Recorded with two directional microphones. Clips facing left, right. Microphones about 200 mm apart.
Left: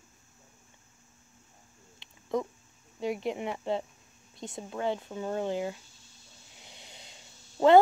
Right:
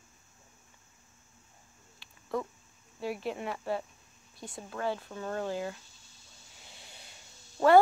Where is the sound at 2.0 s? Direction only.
20° left (ahead or behind).